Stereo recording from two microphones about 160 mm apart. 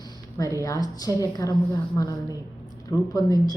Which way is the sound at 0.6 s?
20° left (ahead or behind).